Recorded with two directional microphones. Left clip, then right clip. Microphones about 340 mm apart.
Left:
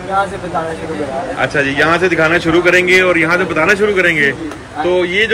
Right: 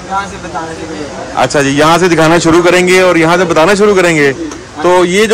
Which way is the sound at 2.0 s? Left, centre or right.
Right.